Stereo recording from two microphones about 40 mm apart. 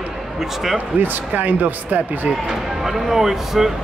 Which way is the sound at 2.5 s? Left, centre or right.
Centre.